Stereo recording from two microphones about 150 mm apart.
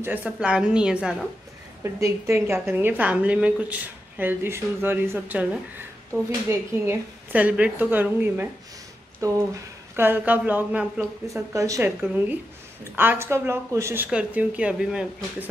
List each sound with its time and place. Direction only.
0.0 s a woman's voice: 10° right (ahead or behind)
1.8 s a woman's voice: 20° right (ahead or behind)
11.2 s a woman's voice: 20° right (ahead or behind); by 15.2 s 5° right (ahead or behind)